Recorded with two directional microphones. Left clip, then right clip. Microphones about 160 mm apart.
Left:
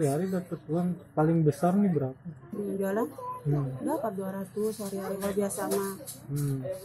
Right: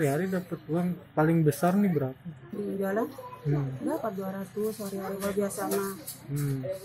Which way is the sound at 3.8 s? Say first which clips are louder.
Left 1 dB; 10° left (ahead or behind).